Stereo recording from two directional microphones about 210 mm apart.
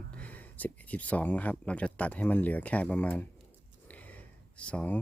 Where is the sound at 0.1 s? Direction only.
5° left (ahead or behind).